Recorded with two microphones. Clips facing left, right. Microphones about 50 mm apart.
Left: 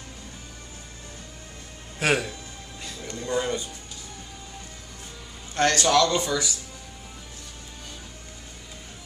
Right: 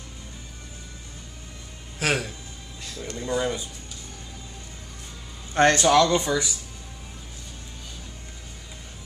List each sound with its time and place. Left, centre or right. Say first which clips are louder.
2.0 s speech: left 2 dB; centre
5.5 s a man's voice: right 4 dB; right
5.8 s speech: right 2 dB; centre